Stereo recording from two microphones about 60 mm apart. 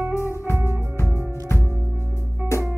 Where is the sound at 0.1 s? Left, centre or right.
Left.